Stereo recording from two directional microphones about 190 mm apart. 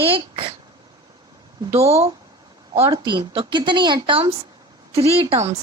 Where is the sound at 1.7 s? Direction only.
15° right (ahead or behind).